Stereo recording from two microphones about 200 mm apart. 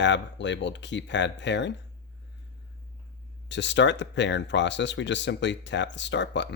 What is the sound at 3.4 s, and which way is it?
Speech, 65° left (ahead or behind).